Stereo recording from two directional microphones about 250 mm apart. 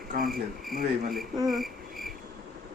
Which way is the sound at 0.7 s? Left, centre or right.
Right.